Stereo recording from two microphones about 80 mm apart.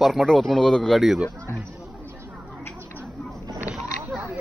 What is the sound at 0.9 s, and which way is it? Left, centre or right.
Speech, centre.